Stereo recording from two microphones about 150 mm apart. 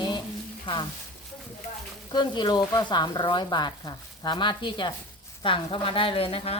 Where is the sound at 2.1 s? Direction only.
30° left (ahead or behind).